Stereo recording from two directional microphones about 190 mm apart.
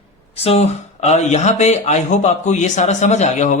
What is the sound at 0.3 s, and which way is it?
Speech, 30° left (ahead or behind).